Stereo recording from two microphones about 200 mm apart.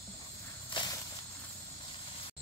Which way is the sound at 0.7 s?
25° left (ahead or behind).